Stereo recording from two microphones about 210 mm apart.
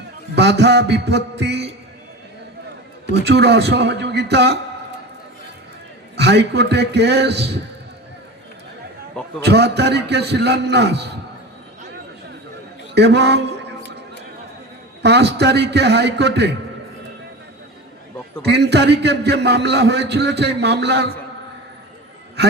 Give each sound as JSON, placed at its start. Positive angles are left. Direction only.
{"t": 0.3, "sound": "a man's voice", "side_deg": -55}
{"t": 3.1, "sound": "a man's voice", "side_deg": -55}
{"t": 6.1, "sound": "a man's voice", "side_deg": -55}
{"t": 9.4, "sound": "a man's voice", "side_deg": -50}
{"t": 12.9, "sound": "a man's voice", "side_deg": -55}
{"t": 15.0, "sound": "a man's voice", "side_deg": -55}
{"t": 18.4, "sound": "a man's voice", "side_deg": -55}